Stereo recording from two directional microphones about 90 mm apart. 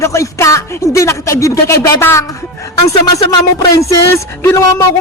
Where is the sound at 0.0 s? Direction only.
35° left (ahead or behind).